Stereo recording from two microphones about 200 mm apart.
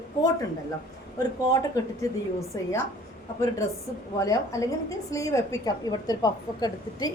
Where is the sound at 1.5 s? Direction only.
15° left (ahead or behind).